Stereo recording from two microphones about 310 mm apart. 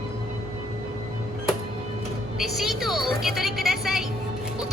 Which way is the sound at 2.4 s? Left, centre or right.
Centre.